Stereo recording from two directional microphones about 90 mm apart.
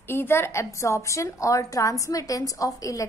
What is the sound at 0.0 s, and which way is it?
A woman's voice, 25° left (ahead or behind).